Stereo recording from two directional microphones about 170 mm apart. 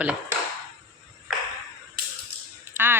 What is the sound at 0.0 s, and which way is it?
Speech, 5° right (ahead or behind).